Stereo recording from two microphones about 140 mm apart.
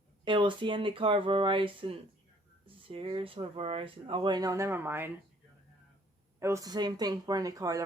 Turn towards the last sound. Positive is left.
turn(degrees=-25)  # may be behind; listen again after turning